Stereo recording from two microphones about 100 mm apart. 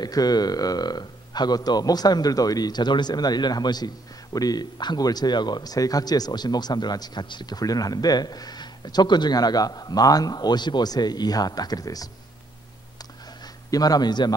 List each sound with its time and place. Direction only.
0.0 s speech: 40° left (ahead or behind)
13.7 s speech: 40° left (ahead or behind)